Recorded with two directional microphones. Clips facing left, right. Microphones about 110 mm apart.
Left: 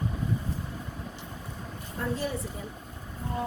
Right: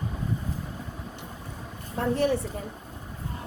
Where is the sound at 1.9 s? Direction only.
65° right (ahead or behind).